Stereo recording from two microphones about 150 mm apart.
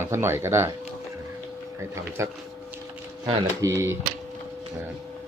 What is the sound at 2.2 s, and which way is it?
Speech, 20° right (ahead or behind).